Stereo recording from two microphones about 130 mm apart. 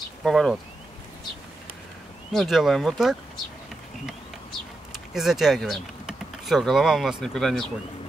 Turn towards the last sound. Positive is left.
turn(degrees=0)  # may be behind; listen again after turning